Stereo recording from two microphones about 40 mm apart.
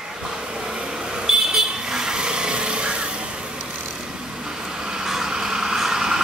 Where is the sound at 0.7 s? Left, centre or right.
Centre.